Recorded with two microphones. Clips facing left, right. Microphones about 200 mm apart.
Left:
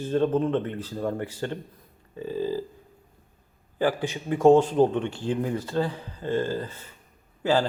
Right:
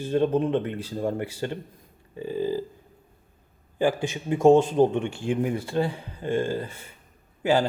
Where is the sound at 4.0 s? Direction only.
25° right (ahead or behind).